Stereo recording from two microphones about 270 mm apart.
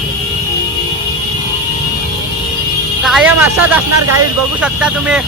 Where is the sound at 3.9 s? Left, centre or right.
Right.